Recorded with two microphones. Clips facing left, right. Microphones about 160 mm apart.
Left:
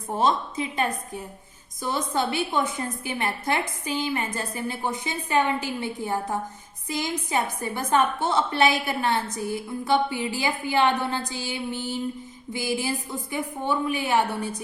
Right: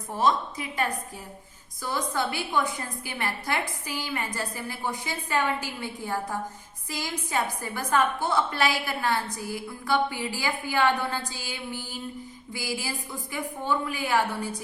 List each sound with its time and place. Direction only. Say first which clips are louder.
0.1 s a woman's voice: left 1 dB; 25° left (ahead or behind)